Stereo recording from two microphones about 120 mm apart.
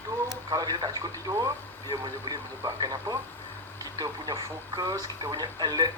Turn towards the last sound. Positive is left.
turn(degrees=-35)  # may be behind; listen again after turning